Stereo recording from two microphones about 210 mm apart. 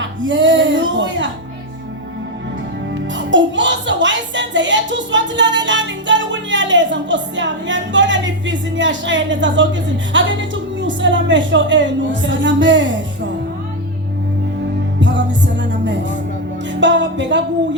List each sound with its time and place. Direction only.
0.0 s speech: 60° right (ahead or behind)
3.2 s speech: 60° right (ahead or behind)
10.8 s a woman's voice: 60° right (ahead or behind)
15.0 s music: 60° right (ahead or behind)
16.8 s a woman's voice: 60° right (ahead or behind)